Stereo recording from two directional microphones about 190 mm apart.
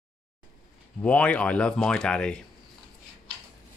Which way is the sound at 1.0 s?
5° left (ahead or behind).